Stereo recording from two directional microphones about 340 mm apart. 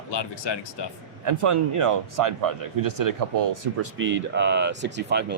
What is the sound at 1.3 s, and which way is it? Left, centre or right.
Speech, right.